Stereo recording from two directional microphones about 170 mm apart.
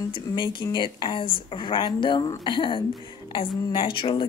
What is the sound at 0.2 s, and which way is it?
Speech, 25° left (ahead or behind).